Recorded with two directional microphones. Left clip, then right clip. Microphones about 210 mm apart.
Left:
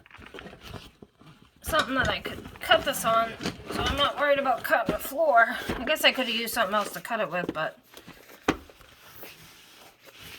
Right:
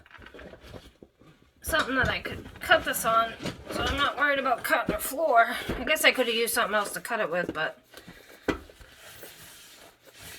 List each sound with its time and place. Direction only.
1.7 s a woman's voice: 45° left (ahead or behind)